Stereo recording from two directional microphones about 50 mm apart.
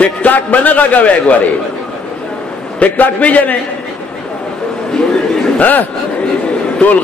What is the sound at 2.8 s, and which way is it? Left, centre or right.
Speech, left.